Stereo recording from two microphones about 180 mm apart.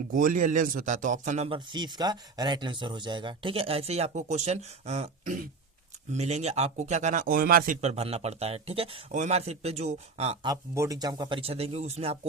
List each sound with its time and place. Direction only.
0.1 s speech: 50° right (ahead or behind)
1.5 s speech: 25° right (ahead or behind); by 7.8 s 50° right (ahead or behind)
7.8 s speech: 35° right (ahead or behind)
10.4 s speech: 20° right (ahead or behind); by 12.1 s 35° right (ahead or behind)